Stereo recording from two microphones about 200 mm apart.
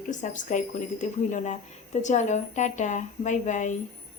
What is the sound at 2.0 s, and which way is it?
Speech, 35° left (ahead or behind).